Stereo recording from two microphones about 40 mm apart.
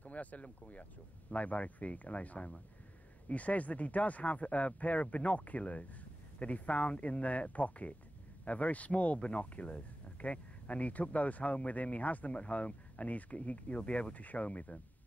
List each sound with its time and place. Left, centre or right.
0.0 s speech: left